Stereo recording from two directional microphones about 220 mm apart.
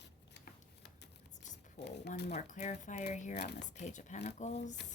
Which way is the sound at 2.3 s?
30° left (ahead or behind).